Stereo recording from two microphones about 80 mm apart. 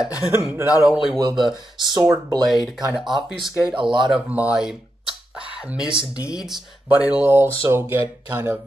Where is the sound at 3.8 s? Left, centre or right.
Right.